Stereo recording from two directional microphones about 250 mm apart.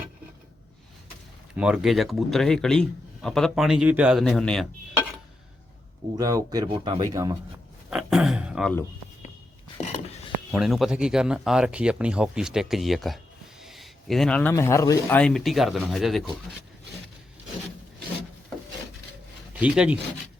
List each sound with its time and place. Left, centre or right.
1.5 s a man's voice: centre
6.1 s speech: centre
7.9 s a man's voice: centre
9.7 s a sound: left
10.5 s a man's voice: centre
19.5 s speech: centre